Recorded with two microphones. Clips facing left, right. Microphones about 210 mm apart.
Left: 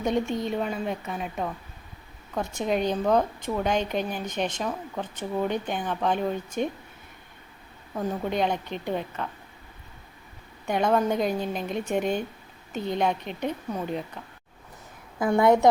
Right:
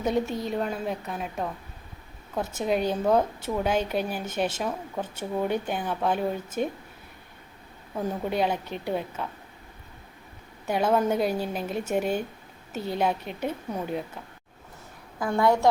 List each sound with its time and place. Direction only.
0.0 s a woman's voice: 5° right (ahead or behind)
7.9 s a woman's voice: 5° right (ahead or behind)
10.7 s a woman's voice: 5° right (ahead or behind)
15.2 s a woman's voice: 20° left (ahead or behind)